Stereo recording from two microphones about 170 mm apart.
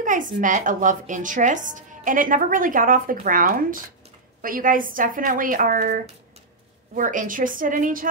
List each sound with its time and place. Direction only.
0.0 s speech: 50° right (ahead or behind)